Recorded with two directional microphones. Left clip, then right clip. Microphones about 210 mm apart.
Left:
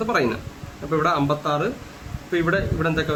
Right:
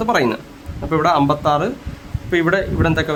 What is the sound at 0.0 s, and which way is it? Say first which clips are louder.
A man's voice: right 5 dB; 55° right (ahead or behind).